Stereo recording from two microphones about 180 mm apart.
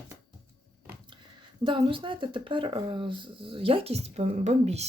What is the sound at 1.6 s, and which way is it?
Speech, 30° right (ahead or behind).